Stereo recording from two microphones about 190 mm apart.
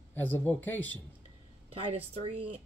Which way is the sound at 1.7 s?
30° right (ahead or behind).